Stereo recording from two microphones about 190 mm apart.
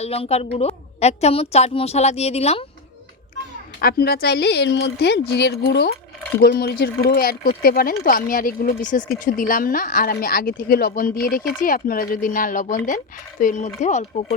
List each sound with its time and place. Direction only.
0.0 s a woman's voice: 35° left (ahead or behind)
3.8 s a woman's voice: 55° left (ahead or behind); by 14.1 s 40° left (ahead or behind)